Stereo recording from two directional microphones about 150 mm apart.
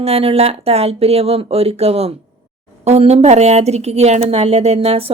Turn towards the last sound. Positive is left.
turn(degrees=-40)  # may be behind; listen again after turning